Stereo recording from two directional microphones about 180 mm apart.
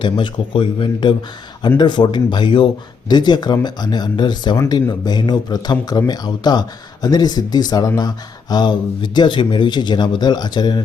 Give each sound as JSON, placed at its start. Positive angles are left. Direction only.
{"t": 0.0, "sound": "speech", "side_deg": 25}